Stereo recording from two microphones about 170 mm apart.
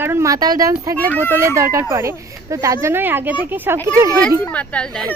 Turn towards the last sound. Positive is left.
turn(degrees=5)  # may be behind; listen again after turning